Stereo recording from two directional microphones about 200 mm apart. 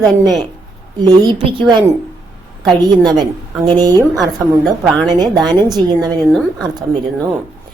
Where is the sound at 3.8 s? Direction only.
20° right (ahead or behind).